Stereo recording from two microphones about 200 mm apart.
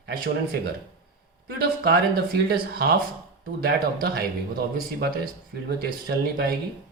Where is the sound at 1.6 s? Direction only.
50° right (ahead or behind).